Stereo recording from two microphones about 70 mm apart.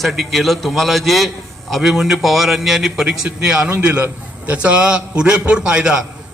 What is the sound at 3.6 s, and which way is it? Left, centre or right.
A man's voice, centre.